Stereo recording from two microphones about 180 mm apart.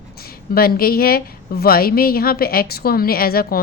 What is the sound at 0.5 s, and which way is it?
Speech, 55° left (ahead or behind).